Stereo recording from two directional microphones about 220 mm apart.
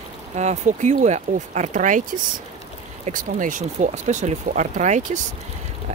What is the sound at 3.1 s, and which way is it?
Speech, 35° right (ahead or behind).